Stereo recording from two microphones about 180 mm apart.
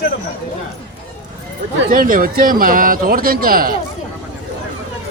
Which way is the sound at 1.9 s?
50° right (ahead or behind).